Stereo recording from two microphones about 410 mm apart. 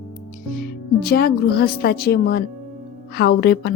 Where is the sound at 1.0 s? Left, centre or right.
Left.